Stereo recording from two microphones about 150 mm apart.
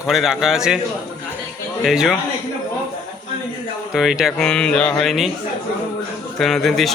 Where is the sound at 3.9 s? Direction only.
5° right (ahead or behind).